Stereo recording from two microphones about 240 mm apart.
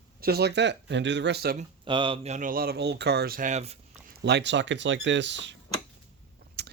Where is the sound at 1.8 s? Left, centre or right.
Right.